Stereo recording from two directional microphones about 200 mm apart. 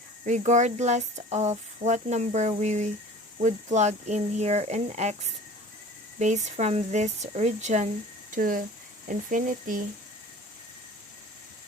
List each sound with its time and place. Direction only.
0.3 s speech: 35° right (ahead or behind)
6.1 s speech: 35° right (ahead or behind)